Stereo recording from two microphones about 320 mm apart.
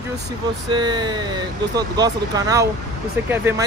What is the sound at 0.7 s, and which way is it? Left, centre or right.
Speech, centre.